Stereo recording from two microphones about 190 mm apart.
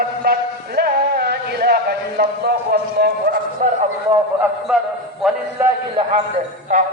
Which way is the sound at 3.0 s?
55° right (ahead or behind).